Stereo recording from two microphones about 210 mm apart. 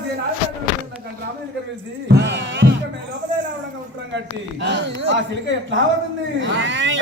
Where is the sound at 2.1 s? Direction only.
55° right (ahead or behind).